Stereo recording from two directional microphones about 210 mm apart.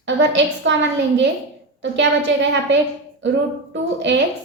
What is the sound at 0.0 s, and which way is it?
Speech, 60° right (ahead or behind).